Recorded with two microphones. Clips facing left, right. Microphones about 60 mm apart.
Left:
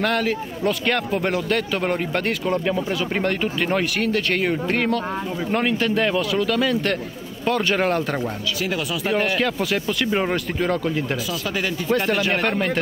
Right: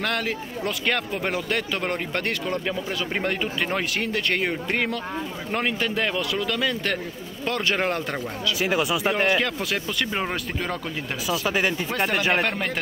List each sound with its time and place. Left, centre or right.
0.0 s a man's voice: centre
8.5 s speech: right
9.1 s a man's voice: centre
11.2 s speech: right
11.9 s a man's voice: centre